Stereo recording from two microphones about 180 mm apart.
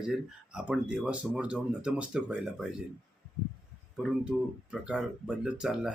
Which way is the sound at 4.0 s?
5° right (ahead or behind).